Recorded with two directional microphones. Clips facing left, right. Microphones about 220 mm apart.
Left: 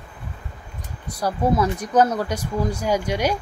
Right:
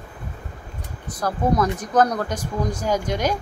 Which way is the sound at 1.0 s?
10° left (ahead or behind).